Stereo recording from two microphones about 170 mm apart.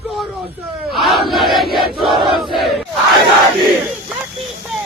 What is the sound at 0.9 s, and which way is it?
Crowd, centre (ahead or behind).